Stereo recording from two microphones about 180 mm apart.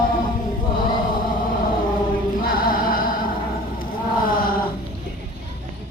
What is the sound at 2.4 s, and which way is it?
Music, 55° left (ahead or behind).